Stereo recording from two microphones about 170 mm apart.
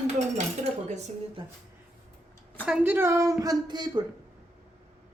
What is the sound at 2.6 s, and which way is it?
A woman's voice, 10° right (ahead or behind).